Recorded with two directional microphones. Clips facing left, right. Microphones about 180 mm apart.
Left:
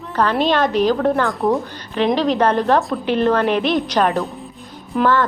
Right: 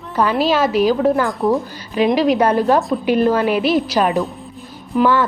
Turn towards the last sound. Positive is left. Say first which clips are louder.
# right 2 dB
turn(degrees=-10)  # may be behind; listen again after turning